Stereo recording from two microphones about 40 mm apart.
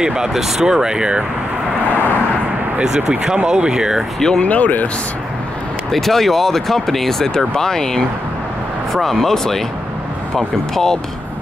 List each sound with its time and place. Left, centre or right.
0.0 s speech: centre
2.8 s speech: centre
4.4 s speech: left
5.9 s speech: centre